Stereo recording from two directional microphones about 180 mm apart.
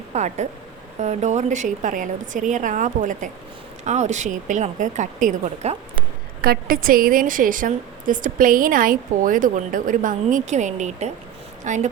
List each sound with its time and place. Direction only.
0.1 s a woman's voice: 40° right (ahead or behind)
6.4 s a woman's voice: 55° right (ahead or behind)